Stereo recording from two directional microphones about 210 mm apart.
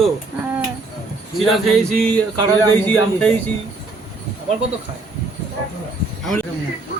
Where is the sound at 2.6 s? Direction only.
5° left (ahead or behind).